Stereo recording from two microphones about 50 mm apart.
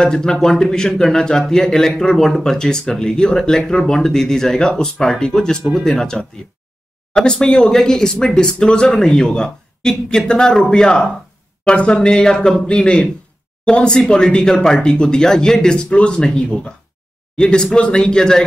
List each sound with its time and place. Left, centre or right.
0.0 s a man's voice: centre